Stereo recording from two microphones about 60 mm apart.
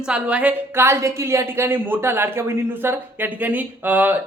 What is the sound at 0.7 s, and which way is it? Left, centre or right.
A woman's voice, right.